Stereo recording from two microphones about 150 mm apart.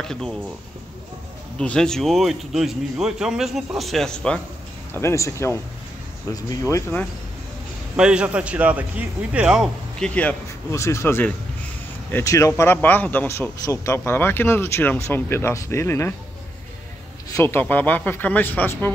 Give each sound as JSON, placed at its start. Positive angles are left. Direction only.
{"t": 0.0, "sound": "speech", "side_deg": 5}
{"t": 1.6, "sound": "speech", "side_deg": 5}
{"t": 4.9, "sound": "speech", "side_deg": 20}
{"t": 7.9, "sound": "a man's voice", "side_deg": -5}
{"t": 10.7, "sound": "speech", "side_deg": 20}
{"t": 17.4, "sound": "speech", "side_deg": 15}